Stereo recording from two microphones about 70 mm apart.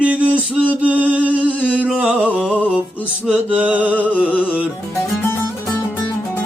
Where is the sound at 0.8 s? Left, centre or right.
Right.